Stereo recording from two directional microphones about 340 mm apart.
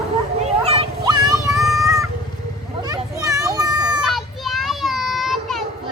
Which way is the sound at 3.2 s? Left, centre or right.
Centre.